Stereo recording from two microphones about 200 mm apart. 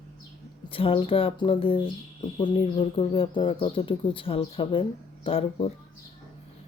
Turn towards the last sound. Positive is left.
turn(degrees=25)  # may be behind; listen again after turning